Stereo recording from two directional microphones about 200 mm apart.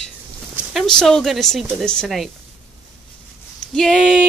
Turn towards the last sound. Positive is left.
turn(degrees=0)  # may be behind; listen again after turning